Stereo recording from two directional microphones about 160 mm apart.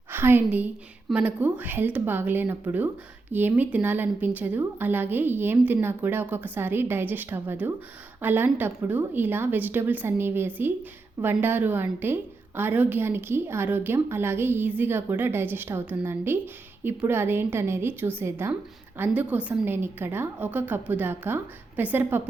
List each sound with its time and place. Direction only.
0.1 s a woman's voice: 15° right (ahead or behind)